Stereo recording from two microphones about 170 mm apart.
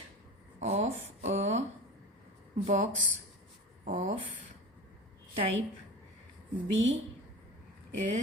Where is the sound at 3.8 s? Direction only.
45° right (ahead or behind).